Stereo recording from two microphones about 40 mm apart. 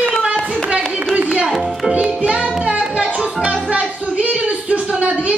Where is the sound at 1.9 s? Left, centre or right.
Right.